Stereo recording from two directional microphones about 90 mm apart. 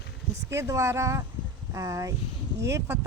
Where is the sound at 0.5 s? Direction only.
35° right (ahead or behind).